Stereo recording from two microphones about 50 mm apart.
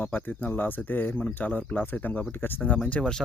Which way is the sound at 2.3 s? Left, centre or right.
Left.